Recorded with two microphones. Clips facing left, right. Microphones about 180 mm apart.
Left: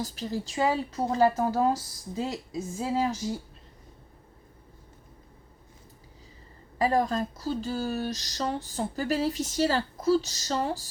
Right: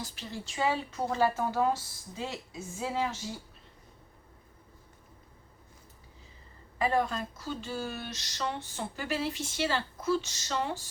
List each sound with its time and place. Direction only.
0.0 s speech: 40° left (ahead or behind)
6.7 s speech: 35° left (ahead or behind)